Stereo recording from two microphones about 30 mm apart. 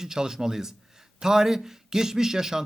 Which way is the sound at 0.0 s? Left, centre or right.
Centre.